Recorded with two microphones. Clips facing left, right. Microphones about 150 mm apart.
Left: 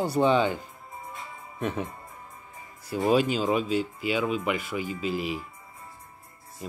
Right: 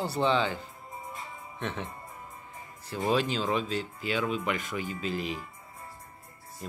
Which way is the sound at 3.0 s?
10° left (ahead or behind).